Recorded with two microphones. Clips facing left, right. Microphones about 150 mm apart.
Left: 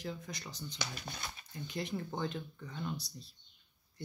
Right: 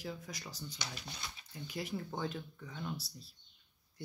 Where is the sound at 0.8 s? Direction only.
50° left (ahead or behind).